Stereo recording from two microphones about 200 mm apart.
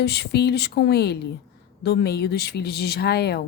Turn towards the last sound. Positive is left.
turn(degrees=55)  # may be behind; listen again after turning